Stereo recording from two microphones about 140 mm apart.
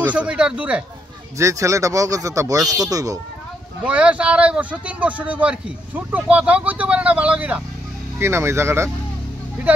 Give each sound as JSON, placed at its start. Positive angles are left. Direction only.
{"t": 0.0, "sound": "speech", "side_deg": -10}
{"t": 1.4, "sound": "speech", "side_deg": -20}
{"t": 3.8, "sound": "speech", "side_deg": -10}